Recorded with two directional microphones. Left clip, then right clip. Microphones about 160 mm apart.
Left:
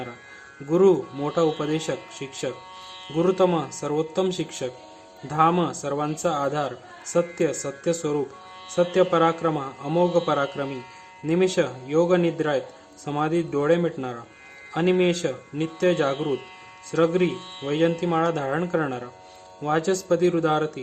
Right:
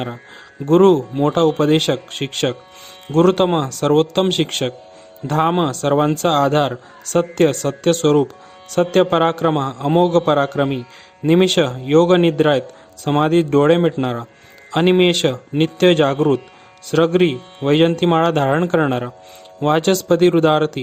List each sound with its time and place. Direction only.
0.7 s a man's voice: 60° right (ahead or behind)